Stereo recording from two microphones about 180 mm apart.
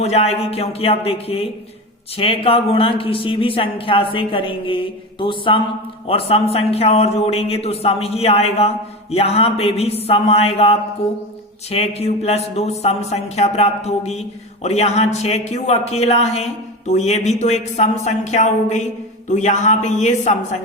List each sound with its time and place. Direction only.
0.0 s speech: 35° left (ahead or behind)